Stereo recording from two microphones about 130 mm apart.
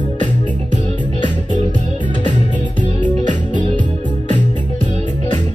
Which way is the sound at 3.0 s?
70° right (ahead or behind).